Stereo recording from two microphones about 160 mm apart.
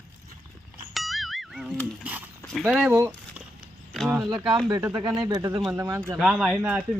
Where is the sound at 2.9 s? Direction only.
20° right (ahead or behind).